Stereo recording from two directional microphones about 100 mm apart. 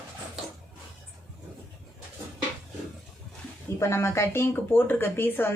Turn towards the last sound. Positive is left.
turn(degrees=20)  # may be behind; listen again after turning